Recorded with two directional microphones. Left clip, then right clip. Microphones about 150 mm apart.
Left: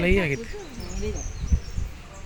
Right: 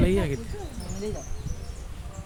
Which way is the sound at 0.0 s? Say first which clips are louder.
Left 3 dB; 10° right (ahead or behind).